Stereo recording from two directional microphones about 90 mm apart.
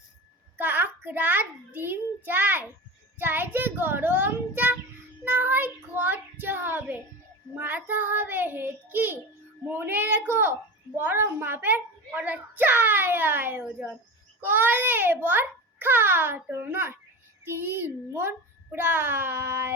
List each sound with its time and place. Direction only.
0.5 s a child's voice: 20° right (ahead or behind)
5.2 s child singing: 15° right (ahead or behind)
7.6 s a woman's voice: 20° right (ahead or behind)